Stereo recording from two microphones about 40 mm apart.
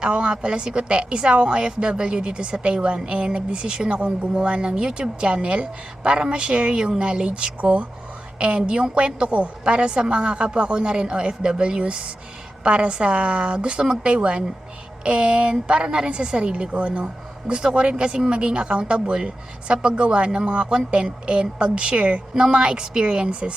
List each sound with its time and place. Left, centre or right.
0.0 s a woman's voice: right
7.6 s a woman's voice: right